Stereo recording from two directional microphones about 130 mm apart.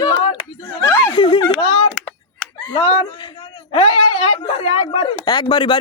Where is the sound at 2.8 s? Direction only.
55° left (ahead or behind).